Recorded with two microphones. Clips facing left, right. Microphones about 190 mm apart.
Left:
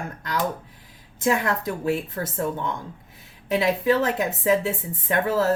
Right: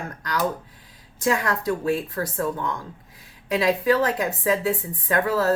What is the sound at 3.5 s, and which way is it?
A woman's voice, 25° left (ahead or behind).